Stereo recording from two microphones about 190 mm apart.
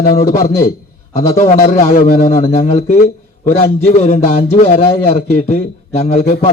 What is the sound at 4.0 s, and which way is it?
A man's voice, 35° left (ahead or behind).